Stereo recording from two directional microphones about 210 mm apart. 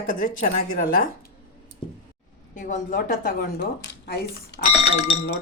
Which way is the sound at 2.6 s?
35° left (ahead or behind).